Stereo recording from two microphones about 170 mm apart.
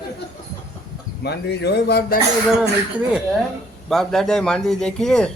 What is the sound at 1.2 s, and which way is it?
Speech, 75° left (ahead or behind).